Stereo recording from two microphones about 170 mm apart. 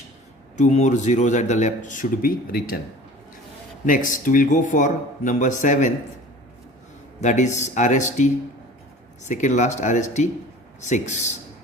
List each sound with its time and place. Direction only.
0.5 s speech: 45° left (ahead or behind); by 2.8 s 60° left (ahead or behind)
3.8 s speech: 50° left (ahead or behind)
7.2 s speech: 45° left (ahead or behind)